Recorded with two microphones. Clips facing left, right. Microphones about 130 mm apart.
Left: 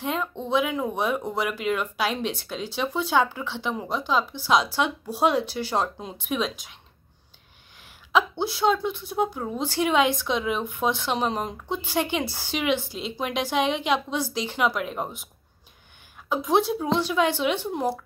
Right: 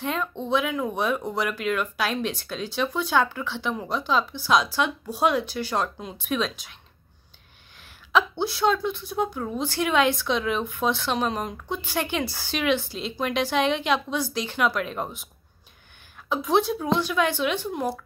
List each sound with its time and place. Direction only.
0.0 s a woman's voice: 15° left (ahead or behind)
7.8 s a woman's voice: 20° left (ahead or behind)
16.3 s speech: 15° left (ahead or behind)